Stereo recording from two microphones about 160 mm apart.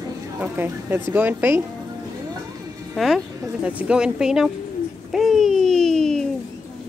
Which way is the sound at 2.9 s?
Centre (ahead or behind).